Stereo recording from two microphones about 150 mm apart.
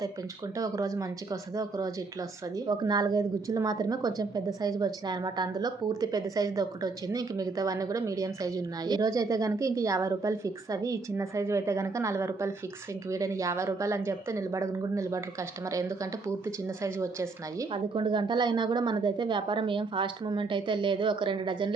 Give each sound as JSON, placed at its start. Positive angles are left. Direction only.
{"t": 0.5, "sound": "a woman's voice", "side_deg": -20}
{"t": 17.7, "sound": "a woman's voice", "side_deg": -30}